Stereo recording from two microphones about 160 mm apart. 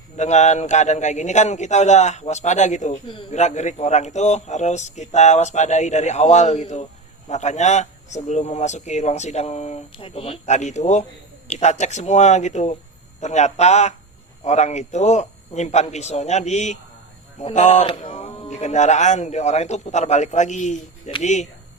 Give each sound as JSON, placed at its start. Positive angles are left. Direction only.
{"t": 0.2, "sound": "a man's voice", "side_deg": 45}